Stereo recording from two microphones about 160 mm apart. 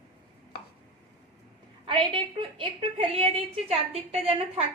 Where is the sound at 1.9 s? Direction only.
35° right (ahead or behind).